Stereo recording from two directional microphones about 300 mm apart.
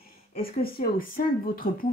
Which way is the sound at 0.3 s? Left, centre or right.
Left.